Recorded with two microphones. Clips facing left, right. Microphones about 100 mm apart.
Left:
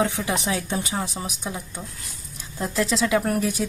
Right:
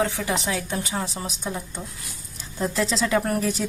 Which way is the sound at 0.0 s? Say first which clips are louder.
Left 1 dB; 15° left (ahead or behind).